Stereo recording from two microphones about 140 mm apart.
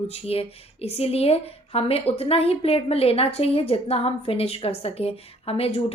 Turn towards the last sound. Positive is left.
turn(degrees=45)  # may be behind; listen again after turning